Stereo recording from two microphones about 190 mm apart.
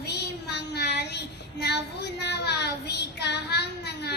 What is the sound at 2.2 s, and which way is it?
Child singing, 60° left (ahead or behind).